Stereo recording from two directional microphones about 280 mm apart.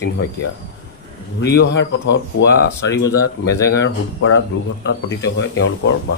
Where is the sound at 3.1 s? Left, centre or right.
Centre.